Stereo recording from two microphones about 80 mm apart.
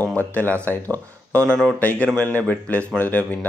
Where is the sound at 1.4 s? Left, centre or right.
Centre.